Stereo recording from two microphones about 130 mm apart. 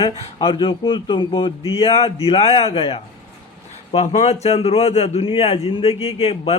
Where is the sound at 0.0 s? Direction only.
40° left (ahead or behind).